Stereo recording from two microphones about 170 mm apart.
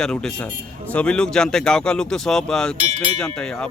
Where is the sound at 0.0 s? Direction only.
5° left (ahead or behind).